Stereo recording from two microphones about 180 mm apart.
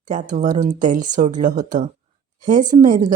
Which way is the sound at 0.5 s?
40° right (ahead or behind).